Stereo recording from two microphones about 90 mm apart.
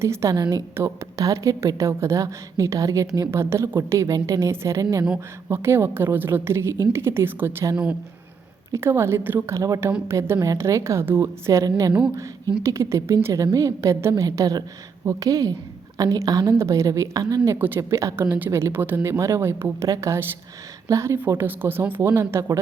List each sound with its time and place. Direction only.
0.0 s a woman's voice: 30° right (ahead or behind)
5.5 s speech: 25° right (ahead or behind)
8.7 s a woman's voice: 30° right (ahead or behind)
18.3 s speech: 20° right (ahead or behind)
19.1 s a woman's voice: 35° right (ahead or behind)
21.2 s speech: 25° right (ahead or behind)